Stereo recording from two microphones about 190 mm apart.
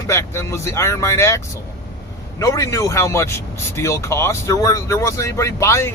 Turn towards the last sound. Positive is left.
turn(degrees=15)  # may be behind; listen again after turning